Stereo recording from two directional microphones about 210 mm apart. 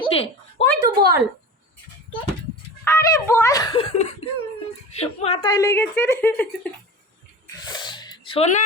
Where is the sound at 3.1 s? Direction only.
15° left (ahead or behind).